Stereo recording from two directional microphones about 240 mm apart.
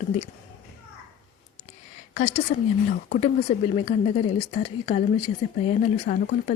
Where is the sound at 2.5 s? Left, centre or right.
Left.